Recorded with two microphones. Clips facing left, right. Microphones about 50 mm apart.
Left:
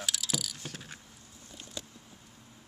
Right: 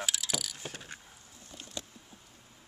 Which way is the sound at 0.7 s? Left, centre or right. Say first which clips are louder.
Even; centre.